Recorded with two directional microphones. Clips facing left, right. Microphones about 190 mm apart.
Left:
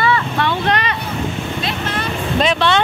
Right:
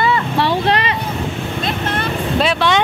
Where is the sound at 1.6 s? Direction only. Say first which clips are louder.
Right 4 dB; 55° right (ahead or behind).